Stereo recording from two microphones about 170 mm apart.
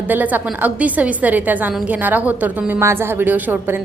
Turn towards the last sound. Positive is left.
turn(degrees=-10)  # may be behind; listen again after turning